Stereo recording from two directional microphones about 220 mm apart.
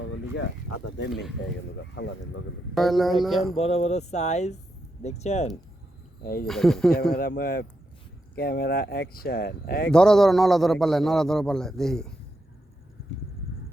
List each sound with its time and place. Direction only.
0.0 s a sound: 60° left (ahead or behind)
2.0 s speech: 55° left (ahead or behind)
2.7 s a man's voice: centre (ahead or behind)
3.4 s a sound: 25° left (ahead or behind)
6.2 s speech: 40° left (ahead or behind)
6.5 s a man's voice: centre (ahead or behind)
7.2 s speech: 40° left (ahead or behind)
9.9 s a man's voice: 5° left (ahead or behind)